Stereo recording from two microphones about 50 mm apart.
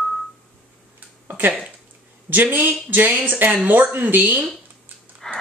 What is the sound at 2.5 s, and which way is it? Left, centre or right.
Speech, right.